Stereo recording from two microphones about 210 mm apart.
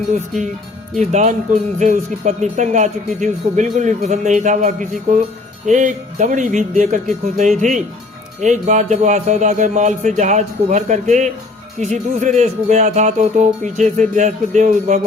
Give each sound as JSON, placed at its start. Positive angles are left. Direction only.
{"t": 0.9, "sound": "speech", "side_deg": -35}